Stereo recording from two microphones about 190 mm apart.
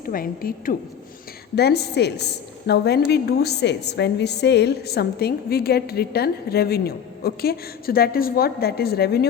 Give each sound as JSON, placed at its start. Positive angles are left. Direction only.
{"t": 0.0, "sound": "a woman's voice", "side_deg": 50}
{"t": 1.5, "sound": "a woman's voice", "side_deg": 60}